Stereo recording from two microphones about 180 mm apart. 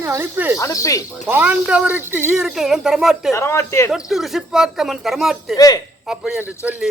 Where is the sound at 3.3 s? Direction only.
15° left (ahead or behind).